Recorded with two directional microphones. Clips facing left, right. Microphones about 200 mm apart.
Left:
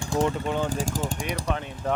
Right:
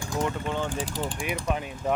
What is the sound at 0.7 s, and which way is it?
Speech, 45° left (ahead or behind).